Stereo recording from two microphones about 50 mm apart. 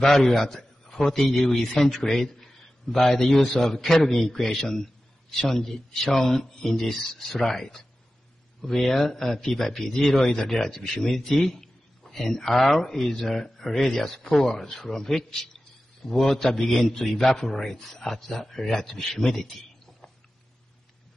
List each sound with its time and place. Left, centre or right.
0.0 s a man's voice: centre
8.6 s a man's voice: centre